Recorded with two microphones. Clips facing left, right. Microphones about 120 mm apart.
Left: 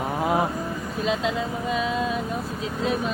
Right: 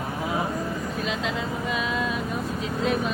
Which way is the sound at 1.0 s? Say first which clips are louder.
Left 6 dB; 30° left (ahead or behind).